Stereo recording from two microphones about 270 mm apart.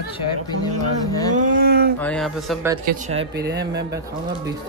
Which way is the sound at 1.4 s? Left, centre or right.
Right.